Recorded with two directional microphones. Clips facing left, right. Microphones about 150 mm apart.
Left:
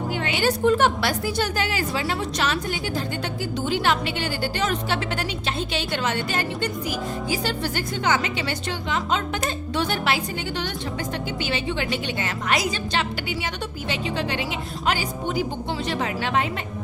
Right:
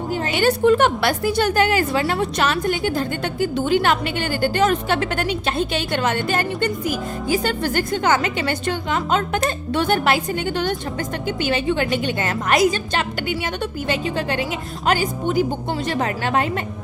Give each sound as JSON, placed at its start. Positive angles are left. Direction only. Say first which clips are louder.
{"t": 0.1, "sound": "music", "louder": "right 3 dB", "side_deg": -40}
{"t": 0.4, "sound": "a woman's voice", "louder": "right 4 dB", "side_deg": -60}
{"t": 11.4, "sound": "a woman's voice", "louder": "right 8 dB", "side_deg": -50}